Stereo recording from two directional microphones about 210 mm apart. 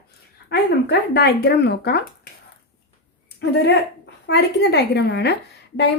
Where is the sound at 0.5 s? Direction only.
50° left (ahead or behind).